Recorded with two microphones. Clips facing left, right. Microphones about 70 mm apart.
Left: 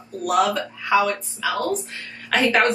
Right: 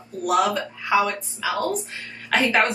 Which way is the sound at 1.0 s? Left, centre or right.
Centre.